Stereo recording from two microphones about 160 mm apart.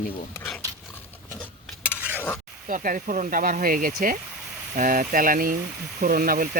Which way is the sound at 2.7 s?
55° right (ahead or behind).